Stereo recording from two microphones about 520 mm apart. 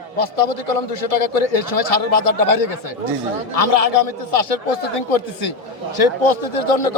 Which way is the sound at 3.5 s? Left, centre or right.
Left.